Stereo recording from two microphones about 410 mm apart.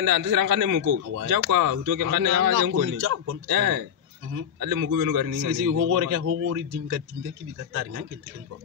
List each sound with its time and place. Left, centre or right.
0.0 s a man's voice: right
0.8 s speech: right
6.2 s a man's voice: right